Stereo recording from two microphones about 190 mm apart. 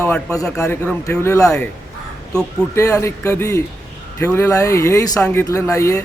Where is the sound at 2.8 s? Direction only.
15° left (ahead or behind).